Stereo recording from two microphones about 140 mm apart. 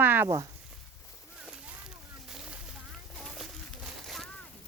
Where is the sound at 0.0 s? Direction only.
15° right (ahead or behind).